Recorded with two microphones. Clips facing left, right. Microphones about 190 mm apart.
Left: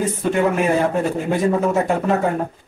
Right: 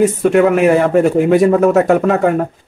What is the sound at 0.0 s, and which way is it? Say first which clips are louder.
Speech: right 8 dB; 75° right (ahead or behind).